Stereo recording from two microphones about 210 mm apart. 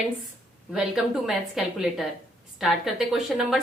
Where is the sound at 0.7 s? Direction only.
Centre (ahead or behind).